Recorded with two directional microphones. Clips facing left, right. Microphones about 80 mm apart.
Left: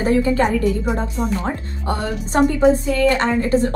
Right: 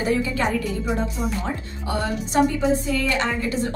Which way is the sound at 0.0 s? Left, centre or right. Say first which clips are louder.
Left 6 dB; left.